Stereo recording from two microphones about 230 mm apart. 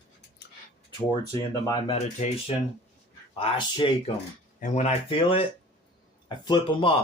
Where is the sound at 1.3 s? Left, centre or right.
Left.